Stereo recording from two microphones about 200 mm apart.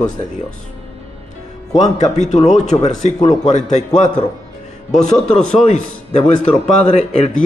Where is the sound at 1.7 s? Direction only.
35° left (ahead or behind).